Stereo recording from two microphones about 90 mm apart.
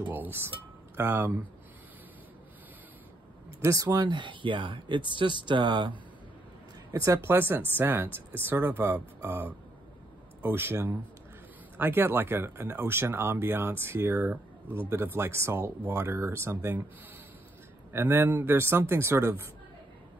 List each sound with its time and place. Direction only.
0.0 s speech: 20° right (ahead or behind)
3.6 s speech: 45° right (ahead or behind); by 5.9 s 60° right (ahead or behind)
6.9 s speech: 35° right (ahead or behind)
7.2 s speech: 25° right (ahead or behind)
17.9 s speech: 25° right (ahead or behind)